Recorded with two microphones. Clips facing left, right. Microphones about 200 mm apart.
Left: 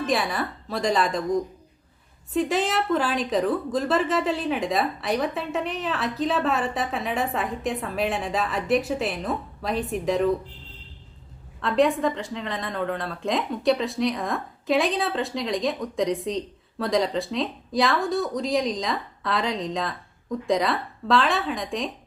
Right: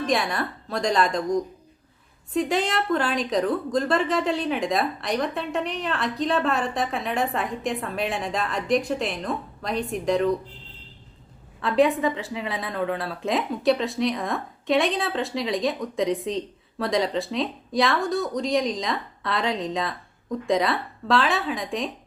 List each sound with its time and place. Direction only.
0.0 s a woman's voice: centre (ahead or behind)
11.6 s a woman's voice: centre (ahead or behind)